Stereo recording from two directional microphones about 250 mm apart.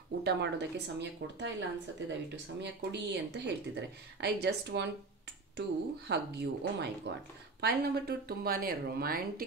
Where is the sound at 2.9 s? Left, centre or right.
Right.